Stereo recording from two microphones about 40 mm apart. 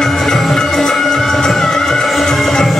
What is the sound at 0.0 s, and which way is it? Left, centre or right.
Music, centre.